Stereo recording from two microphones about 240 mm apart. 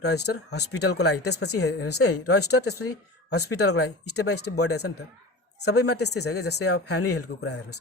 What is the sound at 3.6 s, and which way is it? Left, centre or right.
Speech, left.